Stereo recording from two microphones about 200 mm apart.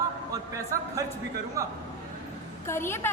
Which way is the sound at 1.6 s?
15° right (ahead or behind).